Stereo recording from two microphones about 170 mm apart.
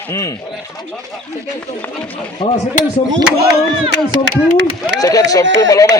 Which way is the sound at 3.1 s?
70° right (ahead or behind).